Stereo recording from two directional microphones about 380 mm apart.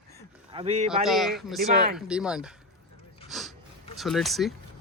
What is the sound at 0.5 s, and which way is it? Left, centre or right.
Speech, centre.